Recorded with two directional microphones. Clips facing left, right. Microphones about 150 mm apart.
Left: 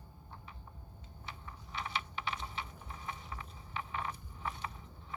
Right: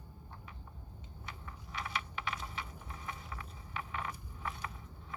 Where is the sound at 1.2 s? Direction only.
30° left (ahead or behind).